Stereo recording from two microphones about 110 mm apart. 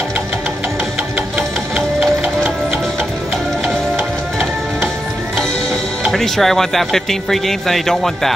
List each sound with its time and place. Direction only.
3.6 s music: 20° right (ahead or behind)
6.0 s speech: 5° left (ahead or behind)